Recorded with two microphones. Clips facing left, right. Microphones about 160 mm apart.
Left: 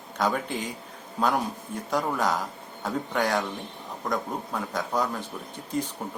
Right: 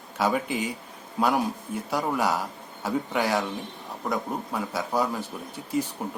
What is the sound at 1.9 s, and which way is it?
Speech, 10° right (ahead or behind).